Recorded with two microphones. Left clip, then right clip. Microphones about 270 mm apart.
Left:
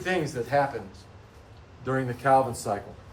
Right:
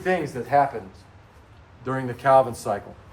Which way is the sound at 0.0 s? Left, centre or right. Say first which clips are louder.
Right 3 dB; right.